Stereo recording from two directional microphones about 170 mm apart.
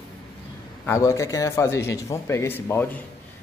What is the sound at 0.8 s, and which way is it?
Speech, 15° left (ahead or behind).